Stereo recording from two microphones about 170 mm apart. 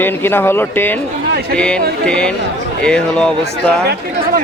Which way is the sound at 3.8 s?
70° right (ahead or behind).